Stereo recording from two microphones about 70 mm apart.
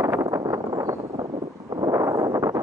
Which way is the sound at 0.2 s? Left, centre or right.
Right.